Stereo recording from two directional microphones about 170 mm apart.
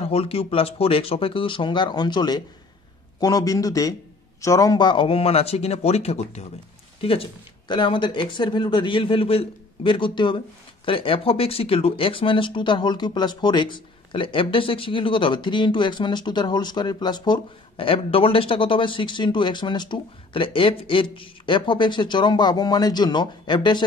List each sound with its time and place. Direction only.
0.0 s speech: 35° left (ahead or behind)